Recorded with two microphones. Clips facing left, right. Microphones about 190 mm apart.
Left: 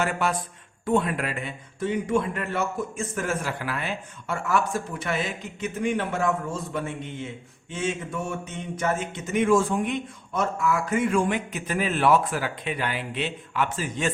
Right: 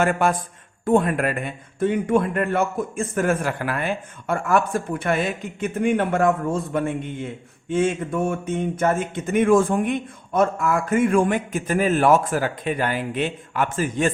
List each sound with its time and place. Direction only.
0.0 s speech: 50° right (ahead or behind)